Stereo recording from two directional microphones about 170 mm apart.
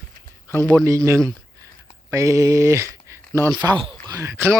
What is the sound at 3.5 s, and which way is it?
Speech, 20° right (ahead or behind).